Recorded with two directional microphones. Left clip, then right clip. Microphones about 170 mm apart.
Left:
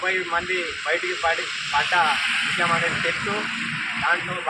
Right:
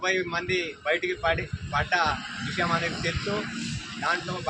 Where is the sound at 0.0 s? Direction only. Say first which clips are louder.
Left 4 dB; 15° right (ahead or behind).